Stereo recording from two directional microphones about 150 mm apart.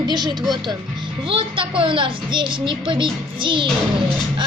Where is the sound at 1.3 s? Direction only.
35° right (ahead or behind).